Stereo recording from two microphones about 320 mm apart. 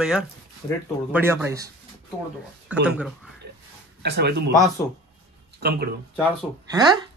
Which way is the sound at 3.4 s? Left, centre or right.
Right.